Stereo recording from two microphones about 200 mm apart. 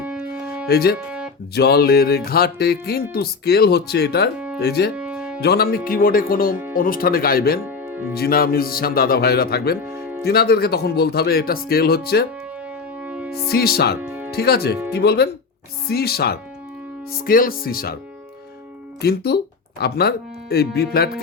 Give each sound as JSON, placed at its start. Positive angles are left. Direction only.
{"t": 0.0, "sound": "music", "side_deg": -5}
{"t": 0.7, "sound": "speech", "side_deg": 50}
{"t": 0.9, "sound": "music", "side_deg": -5}
{"t": 1.5, "sound": "speech", "side_deg": 50}
{"t": 4.9, "sound": "music", "side_deg": -5}
{"t": 5.4, "sound": "speech", "side_deg": 50}
{"t": 9.9, "sound": "music", "side_deg": -10}
{"t": 10.2, "sound": "speech", "side_deg": 50}
{"t": 13.0, "sound": "music", "side_deg": -5}
{"t": 13.5, "sound": "speech", "side_deg": 50}
{"t": 14.0, "sound": "music", "side_deg": -5}
{"t": 14.3, "sound": "speech", "side_deg": 50}
{"t": 19.0, "sound": "speech", "side_deg": 55}